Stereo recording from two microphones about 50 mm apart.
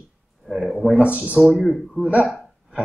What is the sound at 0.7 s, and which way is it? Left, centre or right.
Speech, centre.